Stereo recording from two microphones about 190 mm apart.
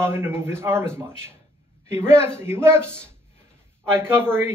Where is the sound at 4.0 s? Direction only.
10° right (ahead or behind).